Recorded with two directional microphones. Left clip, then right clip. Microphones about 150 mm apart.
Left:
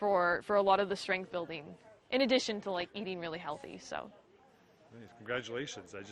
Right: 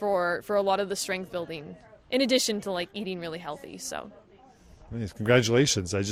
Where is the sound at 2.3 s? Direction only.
70° right (ahead or behind); by 4.1 s 55° right (ahead or behind).